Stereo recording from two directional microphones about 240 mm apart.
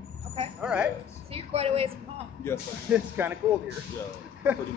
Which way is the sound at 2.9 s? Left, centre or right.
Centre.